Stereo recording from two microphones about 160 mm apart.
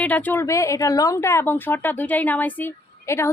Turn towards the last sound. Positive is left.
turn(degrees=15)  # may be behind; listen again after turning